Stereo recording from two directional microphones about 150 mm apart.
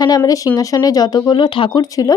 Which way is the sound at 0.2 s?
20° left (ahead or behind).